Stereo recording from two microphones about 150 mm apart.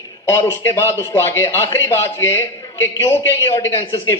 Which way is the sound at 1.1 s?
15° left (ahead or behind).